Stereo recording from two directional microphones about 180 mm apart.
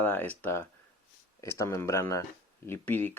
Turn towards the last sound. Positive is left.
turn(degrees=10)  # may be behind; listen again after turning